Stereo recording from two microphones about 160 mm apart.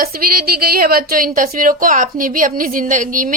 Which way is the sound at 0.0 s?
65° right (ahead or behind).